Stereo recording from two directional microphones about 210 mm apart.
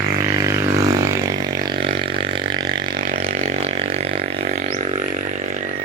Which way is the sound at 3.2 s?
30° right (ahead or behind).